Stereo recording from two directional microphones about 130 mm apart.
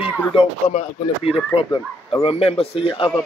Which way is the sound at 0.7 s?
55° left (ahead or behind).